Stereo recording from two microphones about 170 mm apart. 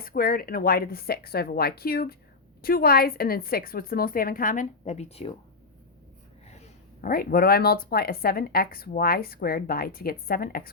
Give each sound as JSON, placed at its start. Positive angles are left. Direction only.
{"t": 0.0, "sound": "speech", "side_deg": 60}
{"t": 7.0, "sound": "speech", "side_deg": 60}